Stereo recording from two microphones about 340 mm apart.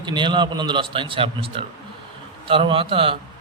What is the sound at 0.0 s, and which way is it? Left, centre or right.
A man's voice, centre.